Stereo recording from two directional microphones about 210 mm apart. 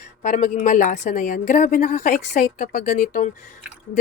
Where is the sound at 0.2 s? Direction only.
35° left (ahead or behind).